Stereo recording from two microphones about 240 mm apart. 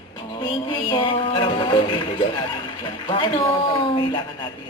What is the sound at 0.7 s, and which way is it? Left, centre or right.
Speech, left.